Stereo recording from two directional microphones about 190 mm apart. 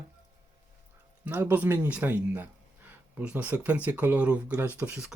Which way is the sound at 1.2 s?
10° right (ahead or behind).